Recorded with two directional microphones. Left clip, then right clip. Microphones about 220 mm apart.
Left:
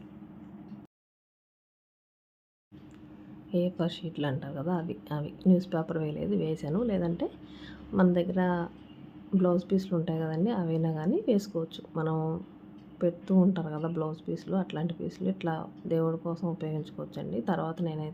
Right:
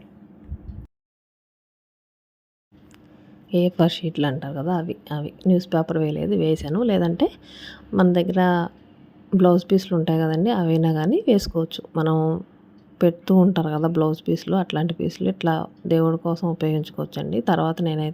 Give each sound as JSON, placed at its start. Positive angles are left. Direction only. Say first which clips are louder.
{"t": 3.5, "sound": "a woman's voice", "louder": "right 11 dB", "side_deg": -35}